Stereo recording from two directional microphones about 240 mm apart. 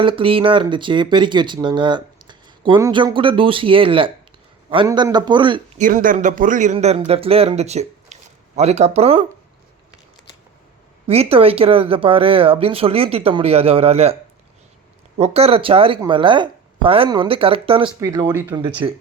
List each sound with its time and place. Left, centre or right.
0.0 s speech: right
5.8 s speech: right
11.0 s speech: right
15.2 s speech: right
18.6 s speech: right